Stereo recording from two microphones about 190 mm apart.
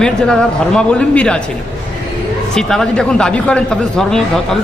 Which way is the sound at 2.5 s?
5° left (ahead or behind).